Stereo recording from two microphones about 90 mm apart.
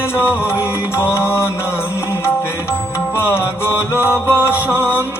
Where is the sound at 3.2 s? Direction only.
25° left (ahead or behind).